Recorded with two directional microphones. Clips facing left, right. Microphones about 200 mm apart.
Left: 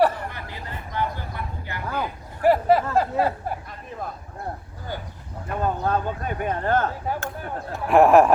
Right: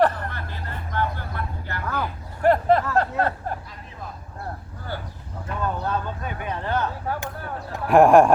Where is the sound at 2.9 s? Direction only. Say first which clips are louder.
Left 1 dB; 10° left (ahead or behind).